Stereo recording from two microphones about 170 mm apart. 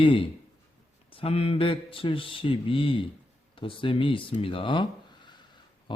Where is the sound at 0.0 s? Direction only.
30° left (ahead or behind).